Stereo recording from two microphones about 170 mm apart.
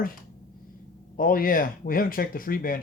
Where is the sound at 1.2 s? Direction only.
55° left (ahead or behind).